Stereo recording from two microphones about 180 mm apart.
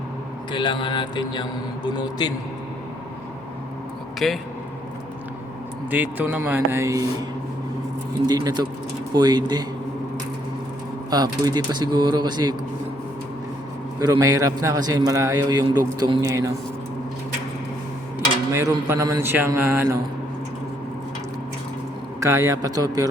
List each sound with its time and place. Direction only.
0.5 s speech: 25° left (ahead or behind)
4.2 s a man's voice: 5° left (ahead or behind)
5.9 s a man's voice: 10° right (ahead or behind)
8.3 s a man's voice: 20° right (ahead or behind)
11.1 s a man's voice: 20° right (ahead or behind)
14.0 s a man's voice: 20° right (ahead or behind)
18.5 s a man's voice: 15° right (ahead or behind)
22.2 s a man's voice: 15° right (ahead or behind)